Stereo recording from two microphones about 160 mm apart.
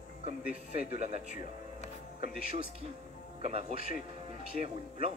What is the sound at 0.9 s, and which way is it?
Speech, 45° right (ahead or behind).